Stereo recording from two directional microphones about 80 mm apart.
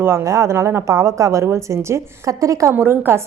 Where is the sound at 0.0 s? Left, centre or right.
Right.